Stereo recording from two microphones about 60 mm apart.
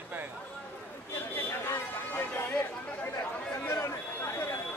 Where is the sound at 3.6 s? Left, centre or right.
Left.